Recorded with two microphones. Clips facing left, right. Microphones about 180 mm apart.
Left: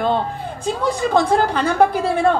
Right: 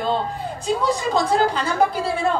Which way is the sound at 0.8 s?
55° left (ahead or behind).